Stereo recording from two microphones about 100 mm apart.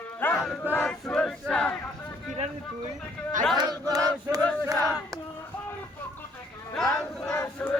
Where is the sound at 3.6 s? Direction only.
40° right (ahead or behind).